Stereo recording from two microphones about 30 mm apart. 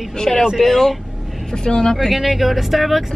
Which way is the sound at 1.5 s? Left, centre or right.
Left.